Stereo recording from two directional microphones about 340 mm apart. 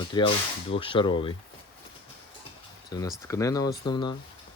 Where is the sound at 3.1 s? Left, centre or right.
Centre.